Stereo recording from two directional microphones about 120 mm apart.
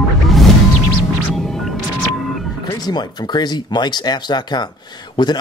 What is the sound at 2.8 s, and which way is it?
Speech, 35° left (ahead or behind).